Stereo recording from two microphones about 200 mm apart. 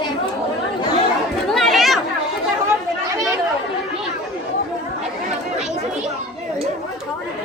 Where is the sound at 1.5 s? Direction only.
Centre (ahead or behind).